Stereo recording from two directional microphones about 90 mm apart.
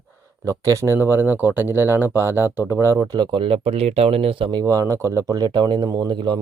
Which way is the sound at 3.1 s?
60° right (ahead or behind).